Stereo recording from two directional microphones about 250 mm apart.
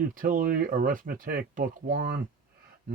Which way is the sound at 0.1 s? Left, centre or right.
Right.